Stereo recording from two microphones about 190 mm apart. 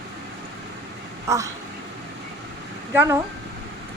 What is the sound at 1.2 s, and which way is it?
Speech, 15° right (ahead or behind).